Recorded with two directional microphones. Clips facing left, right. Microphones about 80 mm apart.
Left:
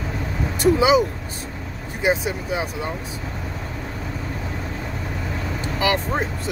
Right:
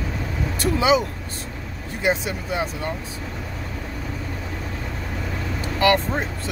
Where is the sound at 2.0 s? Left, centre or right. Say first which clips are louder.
Left 2 dB; centre.